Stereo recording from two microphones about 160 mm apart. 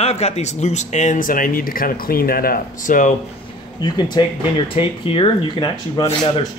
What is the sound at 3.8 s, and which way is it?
Speech, 25° left (ahead or behind).